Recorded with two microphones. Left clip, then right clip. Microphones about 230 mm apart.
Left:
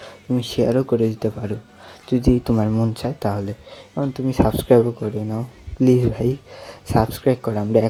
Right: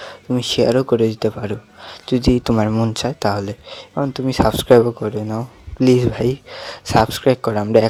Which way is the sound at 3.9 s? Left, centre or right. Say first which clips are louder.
Right 2 dB; right.